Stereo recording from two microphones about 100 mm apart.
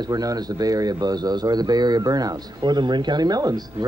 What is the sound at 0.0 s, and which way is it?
Speech, 40° right (ahead or behind).